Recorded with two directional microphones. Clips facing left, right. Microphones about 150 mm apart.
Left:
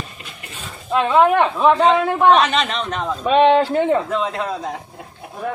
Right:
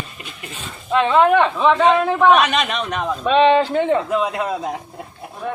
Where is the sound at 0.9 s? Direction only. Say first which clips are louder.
Even; 5° left (ahead or behind).